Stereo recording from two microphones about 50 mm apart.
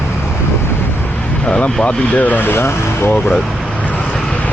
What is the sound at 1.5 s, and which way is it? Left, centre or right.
Speech, left.